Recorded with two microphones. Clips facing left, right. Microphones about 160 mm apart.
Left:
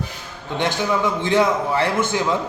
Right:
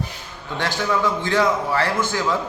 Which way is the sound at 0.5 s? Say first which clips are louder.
Left 2 dB; 20° left (ahead or behind).